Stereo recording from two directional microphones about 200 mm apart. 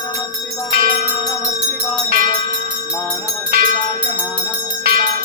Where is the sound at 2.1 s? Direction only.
45° right (ahead or behind).